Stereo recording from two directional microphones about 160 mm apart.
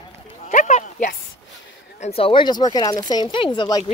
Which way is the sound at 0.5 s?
50° left (ahead or behind).